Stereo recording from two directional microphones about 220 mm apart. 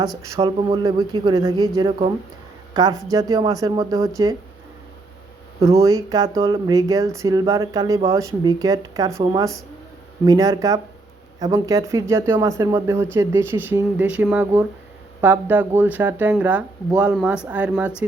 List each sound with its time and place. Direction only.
0.3 s a woman's voice: 20° right (ahead or behind)
5.5 s speech: 15° right (ahead or behind)